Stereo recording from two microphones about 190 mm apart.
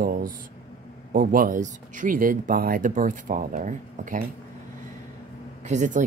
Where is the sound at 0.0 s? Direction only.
50° right (ahead or behind).